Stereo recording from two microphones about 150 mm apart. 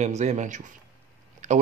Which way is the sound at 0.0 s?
50° right (ahead or behind).